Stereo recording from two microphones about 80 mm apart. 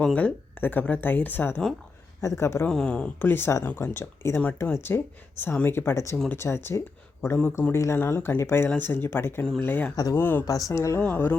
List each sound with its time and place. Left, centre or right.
0.0 s speech: centre; by 2.6 s left
2.6 s speech: centre
3.2 s speech: left
9.9 s speech: left
10.2 s speech: left
10.4 s speech: left
11.0 s speech: left